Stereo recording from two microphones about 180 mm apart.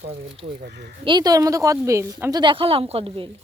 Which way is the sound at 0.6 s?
60° right (ahead or behind).